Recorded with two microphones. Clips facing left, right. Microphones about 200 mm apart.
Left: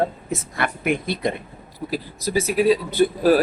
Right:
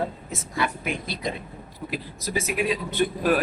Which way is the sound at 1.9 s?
35° left (ahead or behind).